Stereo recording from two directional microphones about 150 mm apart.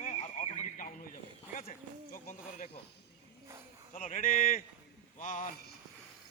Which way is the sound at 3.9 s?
55° left (ahead or behind).